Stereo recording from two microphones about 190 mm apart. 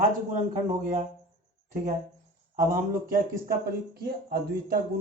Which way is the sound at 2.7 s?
50° right (ahead or behind).